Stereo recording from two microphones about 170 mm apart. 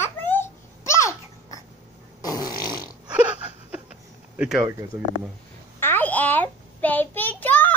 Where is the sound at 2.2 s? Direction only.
20° left (ahead or behind).